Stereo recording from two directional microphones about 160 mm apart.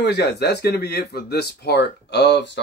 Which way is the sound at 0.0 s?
90° left.